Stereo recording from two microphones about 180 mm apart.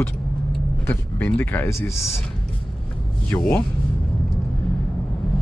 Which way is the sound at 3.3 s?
10° left (ahead or behind).